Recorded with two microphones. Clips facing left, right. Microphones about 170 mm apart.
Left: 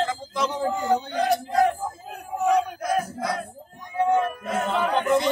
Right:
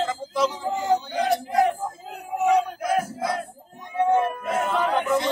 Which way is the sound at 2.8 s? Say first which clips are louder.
Right 1 dB; 25° right (ahead or behind).